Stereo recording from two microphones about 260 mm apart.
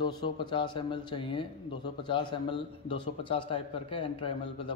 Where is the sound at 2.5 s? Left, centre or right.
Centre.